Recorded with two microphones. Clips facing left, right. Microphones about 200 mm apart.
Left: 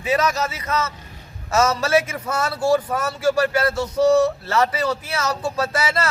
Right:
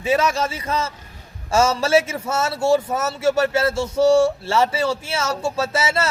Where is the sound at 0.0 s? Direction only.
25° right (ahead or behind).